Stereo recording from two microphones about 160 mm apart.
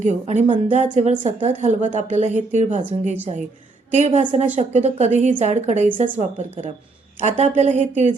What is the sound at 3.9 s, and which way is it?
Speech, 45° right (ahead or behind).